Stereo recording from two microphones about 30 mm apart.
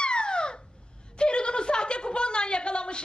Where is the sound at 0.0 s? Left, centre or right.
Left.